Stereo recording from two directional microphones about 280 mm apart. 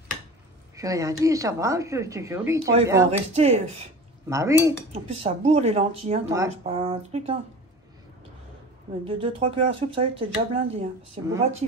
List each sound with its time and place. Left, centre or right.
0.7 s speech: centre
3.3 s speech: right
4.3 s speech: centre
5.2 s speech: right
9.0 s speech: centre